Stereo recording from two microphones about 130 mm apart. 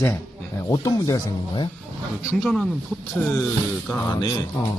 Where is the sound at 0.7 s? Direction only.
25° left (ahead or behind).